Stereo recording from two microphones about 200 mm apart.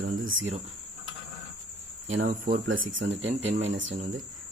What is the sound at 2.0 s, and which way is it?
Speech, 40° right (ahead or behind).